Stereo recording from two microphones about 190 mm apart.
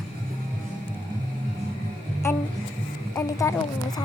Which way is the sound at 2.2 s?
15° left (ahead or behind).